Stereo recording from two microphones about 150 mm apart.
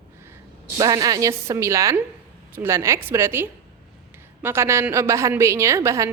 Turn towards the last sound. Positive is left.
turn(degrees=-20)  # may be behind; listen again after turning